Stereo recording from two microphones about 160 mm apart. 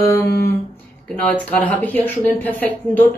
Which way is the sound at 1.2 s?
10° left (ahead or behind).